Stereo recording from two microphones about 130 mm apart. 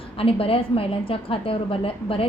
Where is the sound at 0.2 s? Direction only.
45° left (ahead or behind).